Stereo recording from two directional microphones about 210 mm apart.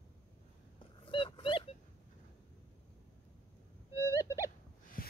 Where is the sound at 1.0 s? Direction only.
25° left (ahead or behind).